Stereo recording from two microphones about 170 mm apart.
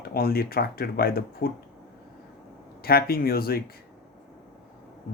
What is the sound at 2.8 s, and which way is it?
Speech, 60° left (ahead or behind).